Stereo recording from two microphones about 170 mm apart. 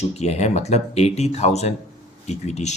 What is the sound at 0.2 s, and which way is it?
Speech, 40° left (ahead or behind).